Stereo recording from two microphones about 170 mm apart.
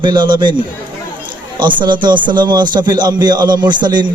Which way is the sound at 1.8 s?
25° right (ahead or behind).